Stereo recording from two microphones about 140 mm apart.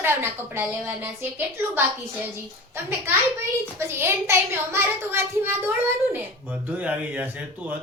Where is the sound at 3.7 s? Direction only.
15° right (ahead or behind).